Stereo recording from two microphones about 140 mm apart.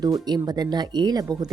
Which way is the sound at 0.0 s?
30° right (ahead or behind).